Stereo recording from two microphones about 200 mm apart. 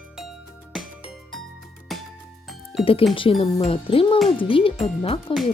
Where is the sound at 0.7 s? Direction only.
Centre (ahead or behind).